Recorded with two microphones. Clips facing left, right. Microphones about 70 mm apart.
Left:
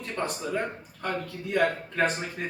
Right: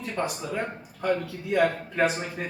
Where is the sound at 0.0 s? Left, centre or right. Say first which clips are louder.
Right 1 dB; centre.